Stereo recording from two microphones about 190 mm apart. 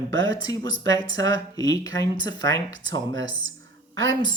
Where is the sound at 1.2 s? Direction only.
20° left (ahead or behind).